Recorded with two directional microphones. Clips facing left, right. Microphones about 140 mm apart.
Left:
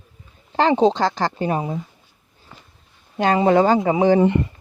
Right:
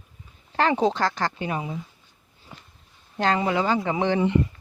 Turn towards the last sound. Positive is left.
turn(degrees=35)  # may be behind; listen again after turning